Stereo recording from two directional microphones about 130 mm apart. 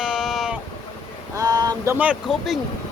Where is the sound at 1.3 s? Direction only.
30° right (ahead or behind).